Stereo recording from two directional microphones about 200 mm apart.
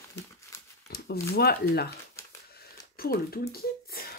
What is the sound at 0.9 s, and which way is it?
Speech, 50° left (ahead or behind).